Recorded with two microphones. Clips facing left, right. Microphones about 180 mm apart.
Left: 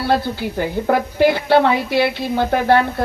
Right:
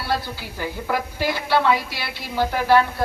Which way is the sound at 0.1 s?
55° left (ahead or behind).